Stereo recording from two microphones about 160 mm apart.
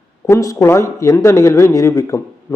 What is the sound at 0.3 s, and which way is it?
Speech, 20° left (ahead or behind).